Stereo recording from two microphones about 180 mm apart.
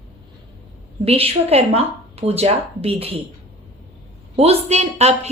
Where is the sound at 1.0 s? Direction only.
35° right (ahead or behind).